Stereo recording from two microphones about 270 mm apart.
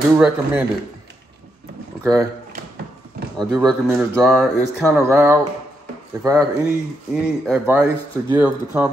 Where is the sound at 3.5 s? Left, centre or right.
Centre.